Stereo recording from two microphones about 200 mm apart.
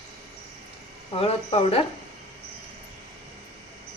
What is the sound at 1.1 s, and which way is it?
Speech, 30° left (ahead or behind).